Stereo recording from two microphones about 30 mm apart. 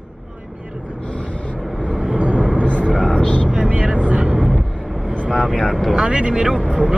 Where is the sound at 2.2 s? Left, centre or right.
Right.